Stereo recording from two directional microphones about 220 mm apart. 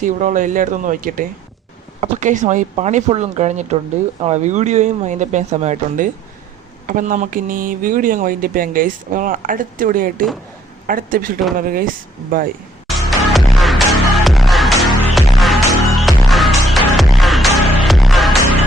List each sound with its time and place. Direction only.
0.0 s speech: 35° right (ahead or behind)
12.9 s music: centre (ahead or behind)